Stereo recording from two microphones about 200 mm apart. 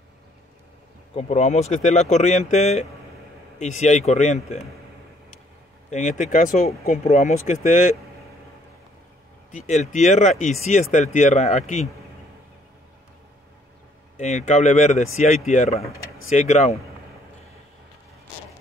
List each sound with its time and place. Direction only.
1.1 s speech: 35° left (ahead or behind)
5.9 s speech: 35° left (ahead or behind)
9.5 s speech: 35° left (ahead or behind)
14.1 s speech: 35° left (ahead or behind)